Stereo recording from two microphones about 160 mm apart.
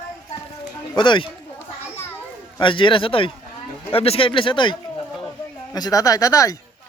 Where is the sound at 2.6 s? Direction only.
30° left (ahead or behind).